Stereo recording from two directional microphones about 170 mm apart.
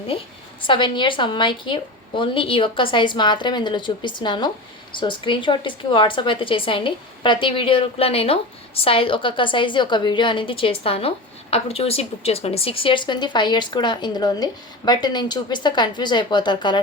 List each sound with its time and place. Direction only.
0.7 s a woman's voice: 30° left (ahead or behind)